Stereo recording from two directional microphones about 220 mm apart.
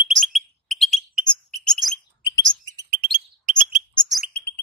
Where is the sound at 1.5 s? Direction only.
Centre (ahead or behind).